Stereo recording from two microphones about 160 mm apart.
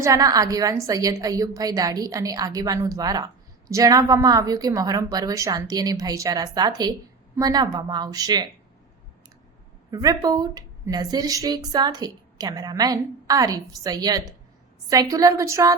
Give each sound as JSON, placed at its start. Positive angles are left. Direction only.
{"t": 0.0, "sound": "a woman's voice", "side_deg": -20}
{"t": 9.9, "sound": "a woman's voice", "side_deg": -20}